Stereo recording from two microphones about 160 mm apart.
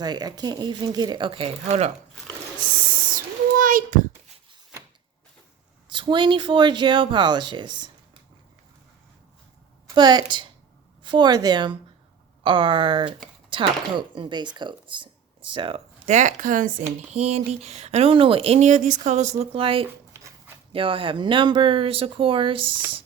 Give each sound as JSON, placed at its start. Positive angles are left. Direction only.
{"t": 0.0, "sound": "speech", "side_deg": -25}
{"t": 3.6, "sound": "a child's voice", "side_deg": -55}
{"t": 5.9, "sound": "speech", "side_deg": -30}
{"t": 9.9, "sound": "speech", "side_deg": -25}
{"t": 16.0, "sound": "speech", "side_deg": -50}
{"t": 17.2, "sound": "speech", "side_deg": -40}
{"t": 20.1, "sound": "a sound", "side_deg": -15}
{"t": 20.7, "sound": "speech", "side_deg": -35}